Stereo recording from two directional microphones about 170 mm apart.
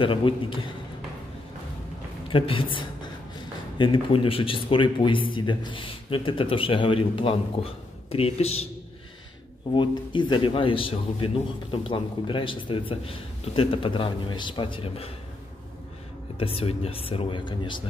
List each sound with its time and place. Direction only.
0.0 s speech: 30° left (ahead or behind)
2.2 s a man's voice: 30° left (ahead or behind)
9.8 s a man's voice: 30° left (ahead or behind)
16.3 s speech: 35° left (ahead or behind)